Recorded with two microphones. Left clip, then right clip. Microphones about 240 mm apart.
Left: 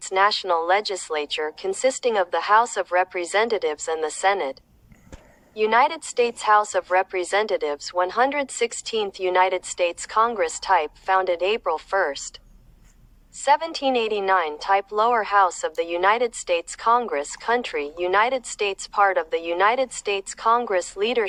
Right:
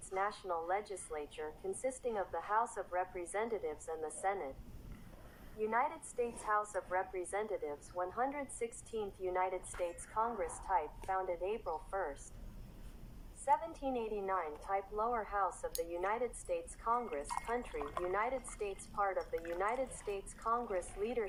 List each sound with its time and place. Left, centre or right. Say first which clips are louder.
0.1 s speech: left 18 dB; left
5.5 s a woman's voice: left 17 dB; left
13.4 s speech: left 15 dB; left